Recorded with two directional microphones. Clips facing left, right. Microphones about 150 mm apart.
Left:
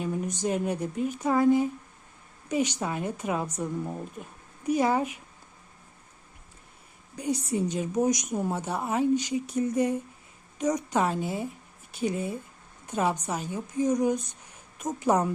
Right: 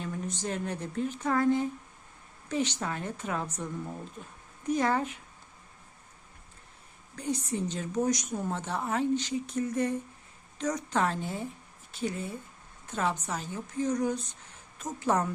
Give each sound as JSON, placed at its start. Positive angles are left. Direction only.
{"t": 0.0, "sound": "a woman's voice", "side_deg": 15}
{"t": 7.2, "sound": "a woman's voice", "side_deg": 10}